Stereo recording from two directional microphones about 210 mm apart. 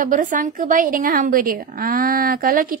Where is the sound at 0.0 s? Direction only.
40° right (ahead or behind).